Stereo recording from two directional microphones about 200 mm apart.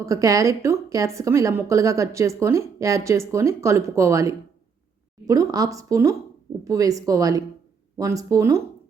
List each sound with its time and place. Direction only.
0.0 s a woman's voice: 15° right (ahead or behind)